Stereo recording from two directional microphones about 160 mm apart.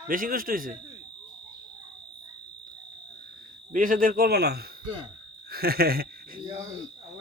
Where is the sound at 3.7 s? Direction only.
60° right (ahead or behind); by 4.6 s 80° right.